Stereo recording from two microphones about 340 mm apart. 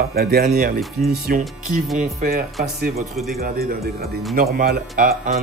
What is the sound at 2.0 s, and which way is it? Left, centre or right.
Speech, right.